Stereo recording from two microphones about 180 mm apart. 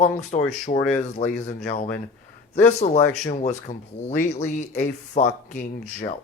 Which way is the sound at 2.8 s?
40° left (ahead or behind).